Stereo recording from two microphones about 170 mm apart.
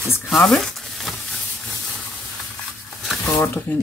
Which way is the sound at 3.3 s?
15° left (ahead or behind).